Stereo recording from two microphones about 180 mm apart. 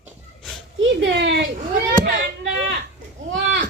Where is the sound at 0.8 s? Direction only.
80° right.